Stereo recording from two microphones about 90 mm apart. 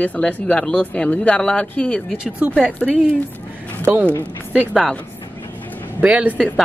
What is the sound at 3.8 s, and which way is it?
Speech, 20° right (ahead or behind).